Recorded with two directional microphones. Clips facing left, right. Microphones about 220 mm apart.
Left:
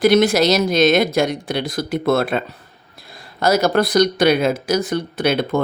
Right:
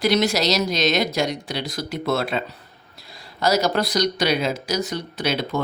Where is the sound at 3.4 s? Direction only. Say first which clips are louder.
Left 4 dB; 55° left (ahead or behind).